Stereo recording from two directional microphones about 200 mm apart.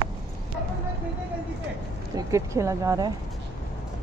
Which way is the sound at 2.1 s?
15° right (ahead or behind).